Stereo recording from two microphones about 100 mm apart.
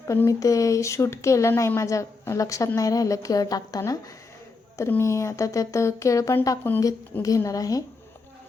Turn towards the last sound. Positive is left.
turn(degrees=35)  # may be behind; listen again after turning